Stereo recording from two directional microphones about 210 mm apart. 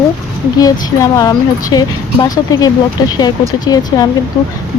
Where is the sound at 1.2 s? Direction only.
20° left (ahead or behind).